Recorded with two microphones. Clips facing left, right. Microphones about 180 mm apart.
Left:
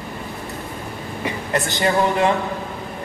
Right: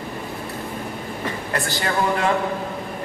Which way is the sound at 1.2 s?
20° left (ahead or behind).